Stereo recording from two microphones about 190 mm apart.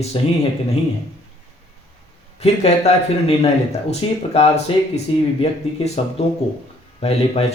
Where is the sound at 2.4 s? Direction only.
35° left (ahead or behind).